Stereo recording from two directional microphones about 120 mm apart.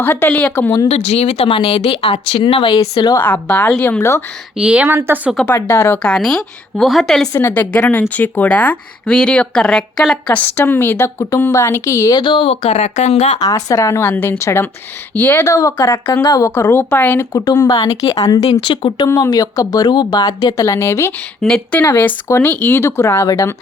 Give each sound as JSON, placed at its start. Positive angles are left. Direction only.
{"t": 0.0, "sound": "a woman's voice", "side_deg": 15}
{"t": 0.9, "sound": "speech", "side_deg": 65}
{"t": 2.7, "sound": "speech", "side_deg": 35}
{"t": 3.2, "sound": "a woman's voice", "side_deg": 15}
{"t": 4.5, "sound": "a woman's voice", "side_deg": -10}
{"t": 5.5, "sound": "speech", "side_deg": 20}
{"t": 6.0, "sound": "speech", "side_deg": 5}
{"t": 7.3, "sound": "a woman's voice", "side_deg": 15}
{"t": 12.2, "sound": "speech", "side_deg": 45}
{"t": 13.4, "sound": "speech", "side_deg": 30}
{"t": 17.3, "sound": "speech", "side_deg": 30}
{"t": 18.6, "sound": "speech", "side_deg": 40}
{"t": 19.0, "sound": "speech", "side_deg": 30}
{"t": 21.4, "sound": "speech", "side_deg": 10}